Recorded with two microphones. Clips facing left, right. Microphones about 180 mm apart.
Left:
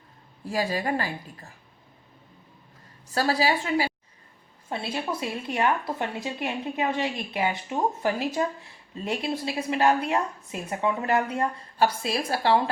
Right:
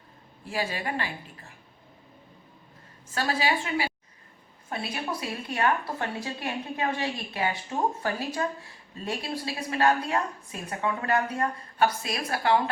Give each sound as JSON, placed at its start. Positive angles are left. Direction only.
{"t": 0.4, "sound": "a woman's voice", "side_deg": 40}
{"t": 3.1, "sound": "a woman's voice", "side_deg": 35}
{"t": 4.7, "sound": "a woman's voice", "side_deg": 25}